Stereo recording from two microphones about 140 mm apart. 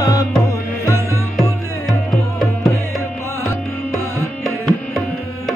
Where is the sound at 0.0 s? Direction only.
25° left (ahead or behind).